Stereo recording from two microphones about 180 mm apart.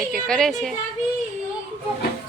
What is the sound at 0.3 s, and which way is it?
Speech, 5° left (ahead or behind).